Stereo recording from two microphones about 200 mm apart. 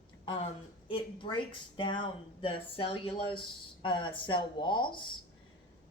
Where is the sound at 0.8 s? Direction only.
25° left (ahead or behind).